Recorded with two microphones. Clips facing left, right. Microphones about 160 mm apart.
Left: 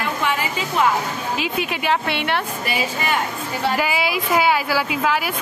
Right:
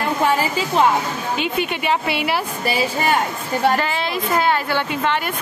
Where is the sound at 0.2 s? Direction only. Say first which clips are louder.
Right 4 dB; 35° right (ahead or behind).